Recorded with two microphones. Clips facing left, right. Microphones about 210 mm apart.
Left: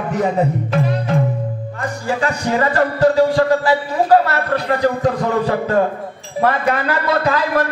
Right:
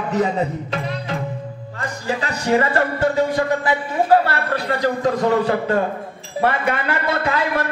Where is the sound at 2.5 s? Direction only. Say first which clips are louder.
Right 1 dB; 30° right (ahead or behind).